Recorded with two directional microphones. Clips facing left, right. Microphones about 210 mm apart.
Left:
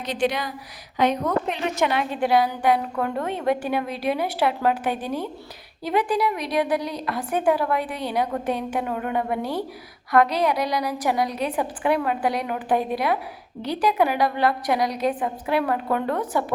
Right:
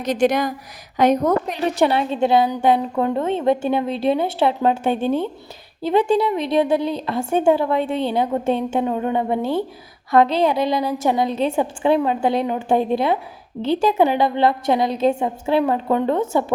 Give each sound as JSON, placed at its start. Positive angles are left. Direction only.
{"t": 0.0, "sound": "a woman's voice", "side_deg": -45}